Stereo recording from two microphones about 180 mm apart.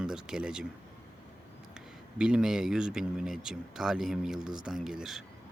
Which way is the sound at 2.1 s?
5° right (ahead or behind).